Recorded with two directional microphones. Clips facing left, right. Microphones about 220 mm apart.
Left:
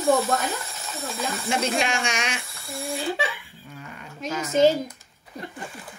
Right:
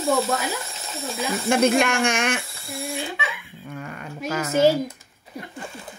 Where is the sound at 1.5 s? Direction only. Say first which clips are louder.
Right 7 dB; 55° right (ahead or behind).